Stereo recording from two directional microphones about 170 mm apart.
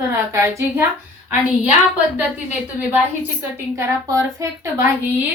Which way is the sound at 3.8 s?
15° right (ahead or behind).